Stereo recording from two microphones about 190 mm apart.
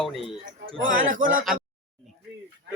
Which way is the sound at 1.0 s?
45° right (ahead or behind).